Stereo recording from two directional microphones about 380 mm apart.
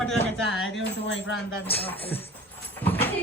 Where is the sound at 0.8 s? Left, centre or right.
Left.